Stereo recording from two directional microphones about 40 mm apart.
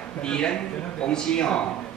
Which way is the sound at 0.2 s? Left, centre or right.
Left.